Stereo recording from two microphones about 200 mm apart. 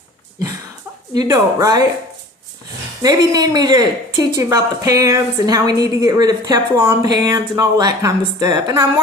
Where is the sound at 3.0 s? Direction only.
20° right (ahead or behind).